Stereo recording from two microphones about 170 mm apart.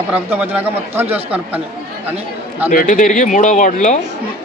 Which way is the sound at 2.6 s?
45° left (ahead or behind).